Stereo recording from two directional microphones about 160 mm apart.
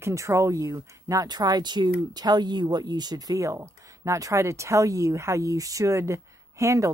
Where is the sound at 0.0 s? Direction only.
20° right (ahead or behind).